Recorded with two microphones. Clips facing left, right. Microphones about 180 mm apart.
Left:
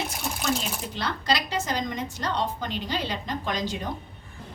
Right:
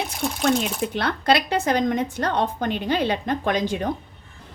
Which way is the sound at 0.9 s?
60° right (ahead or behind).